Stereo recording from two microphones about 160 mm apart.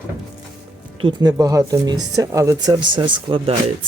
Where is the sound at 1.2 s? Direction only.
25° right (ahead or behind).